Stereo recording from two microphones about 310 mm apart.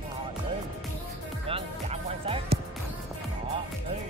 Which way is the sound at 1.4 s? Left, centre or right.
Centre.